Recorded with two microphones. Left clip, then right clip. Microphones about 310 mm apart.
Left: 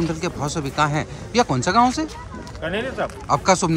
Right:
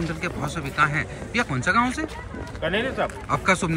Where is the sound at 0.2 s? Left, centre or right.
Centre.